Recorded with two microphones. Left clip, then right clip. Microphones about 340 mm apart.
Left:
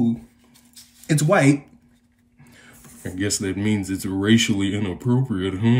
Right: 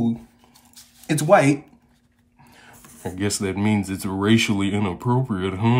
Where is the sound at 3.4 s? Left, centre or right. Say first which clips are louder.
Right 1 dB; centre.